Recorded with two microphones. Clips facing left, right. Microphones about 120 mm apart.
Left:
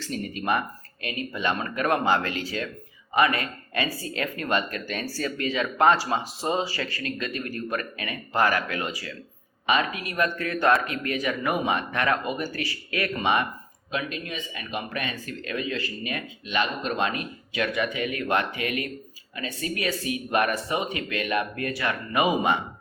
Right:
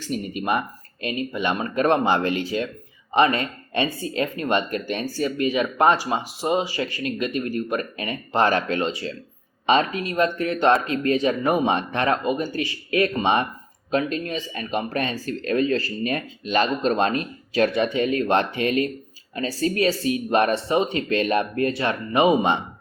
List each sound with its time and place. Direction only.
0.0 s speech: 15° right (ahead or behind)
13.9 s speech: 40° right (ahead or behind)